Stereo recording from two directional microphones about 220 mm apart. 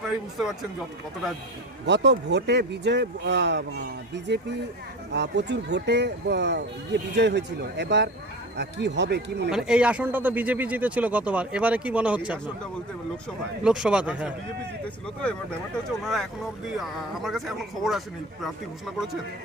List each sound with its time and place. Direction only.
0.3 s speech: centre (ahead or behind)
1.9 s speech: 50° right (ahead or behind)
9.5 s speech: centre (ahead or behind)
13.7 s speech: 5° right (ahead or behind)